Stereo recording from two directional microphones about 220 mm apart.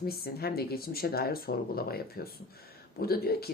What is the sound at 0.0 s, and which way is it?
Speech, 45° left (ahead or behind).